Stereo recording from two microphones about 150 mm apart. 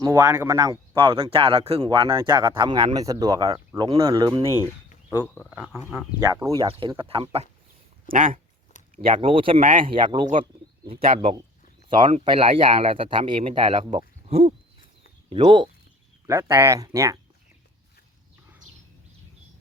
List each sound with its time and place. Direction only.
0.0 s speech: 20° right (ahead or behind)
0.9 s speech: 35° right (ahead or behind); by 5.8 s 10° right (ahead or behind)
6.1 s speech: 25° right (ahead or behind)
6.7 s speech: 35° right (ahead or behind)
8.0 s speech: 65° right (ahead or behind)
9.2 s speech: 35° right (ahead or behind)
9.6 s speech: 65° right (ahead or behind)
9.8 s speech: 35° right (ahead or behind)
15.4 s speech: 30° right (ahead or behind)
16.2 s speech: 20° right (ahead or behind)